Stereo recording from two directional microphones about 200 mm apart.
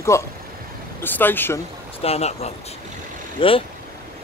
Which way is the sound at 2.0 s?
30° left (ahead or behind).